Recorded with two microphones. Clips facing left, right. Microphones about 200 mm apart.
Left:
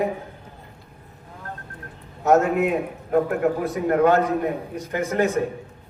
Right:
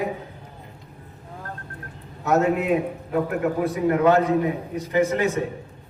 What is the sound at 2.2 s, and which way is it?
Speech, 45° left (ahead or behind).